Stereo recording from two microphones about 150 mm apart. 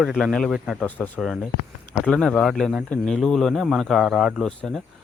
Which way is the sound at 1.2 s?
Centre (ahead or behind).